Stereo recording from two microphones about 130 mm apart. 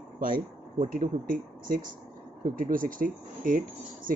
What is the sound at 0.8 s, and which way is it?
Speech, 90° right.